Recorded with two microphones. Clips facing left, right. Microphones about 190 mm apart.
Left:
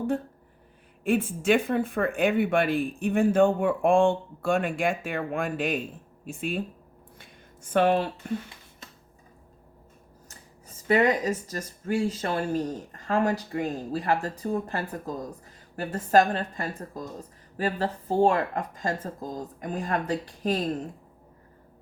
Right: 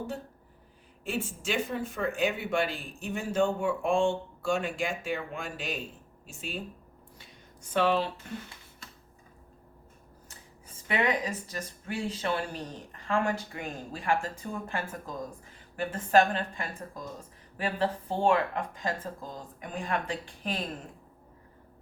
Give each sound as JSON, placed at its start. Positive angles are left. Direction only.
{"t": 1.0, "sound": "speech", "side_deg": 55}
{"t": 7.2, "sound": "a sound", "side_deg": 55}
{"t": 10.2, "sound": "speech", "side_deg": 40}